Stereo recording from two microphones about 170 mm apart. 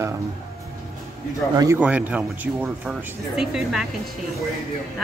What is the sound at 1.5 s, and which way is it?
Speech, 20° right (ahead or behind).